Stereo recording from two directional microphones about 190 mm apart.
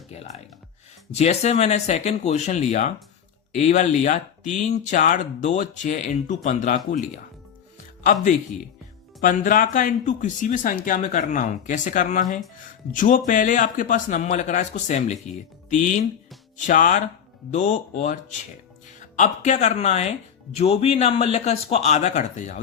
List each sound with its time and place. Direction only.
0.1 s speech: 35° left (ahead or behind)
9.2 s speech: 45° left (ahead or behind)